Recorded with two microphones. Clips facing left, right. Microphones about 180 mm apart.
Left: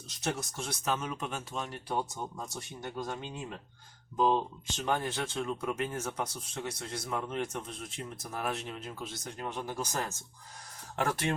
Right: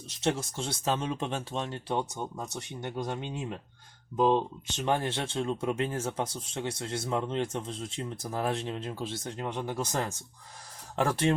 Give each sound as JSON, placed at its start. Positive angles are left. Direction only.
{"t": 0.2, "sound": "speech", "side_deg": -25}
{"t": 4.9, "sound": "speech", "side_deg": -25}